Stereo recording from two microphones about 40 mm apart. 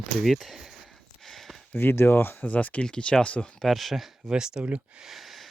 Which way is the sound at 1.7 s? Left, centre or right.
Left.